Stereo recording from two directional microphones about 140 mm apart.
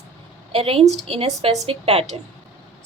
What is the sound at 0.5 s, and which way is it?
A woman's voice, 40° right (ahead or behind).